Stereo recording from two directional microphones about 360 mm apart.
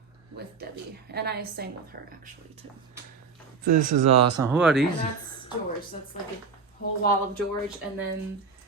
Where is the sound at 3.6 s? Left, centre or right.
Right.